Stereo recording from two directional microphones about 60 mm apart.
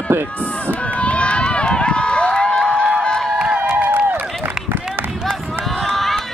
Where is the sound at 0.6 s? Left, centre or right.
Left.